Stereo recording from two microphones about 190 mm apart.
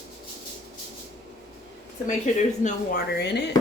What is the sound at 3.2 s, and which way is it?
Speech, 60° left (ahead or behind).